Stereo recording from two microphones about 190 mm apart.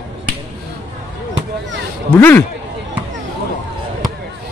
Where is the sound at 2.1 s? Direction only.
10° left (ahead or behind).